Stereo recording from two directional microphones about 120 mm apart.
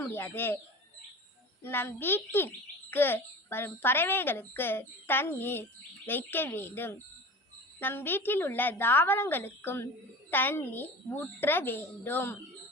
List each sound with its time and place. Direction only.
0.0 s a child's voice: 15° left (ahead or behind)
1.6 s a child's voice: 20° left (ahead or behind)